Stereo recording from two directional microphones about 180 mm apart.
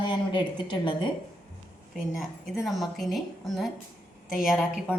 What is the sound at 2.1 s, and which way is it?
A woman's voice, centre (ahead or behind).